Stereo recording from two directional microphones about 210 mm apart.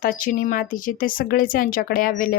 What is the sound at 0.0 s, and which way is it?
Speech, 40° left (ahead or behind).